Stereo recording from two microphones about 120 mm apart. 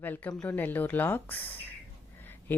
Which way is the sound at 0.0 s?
15° left (ahead or behind).